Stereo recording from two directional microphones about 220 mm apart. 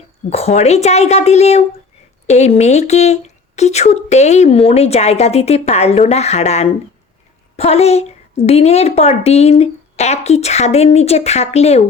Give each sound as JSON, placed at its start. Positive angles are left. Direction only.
{"t": 0.3, "sound": "a woman's voice", "side_deg": 30}